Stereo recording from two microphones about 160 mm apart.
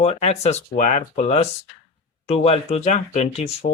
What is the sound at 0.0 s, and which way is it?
Speech, 40° left (ahead or behind).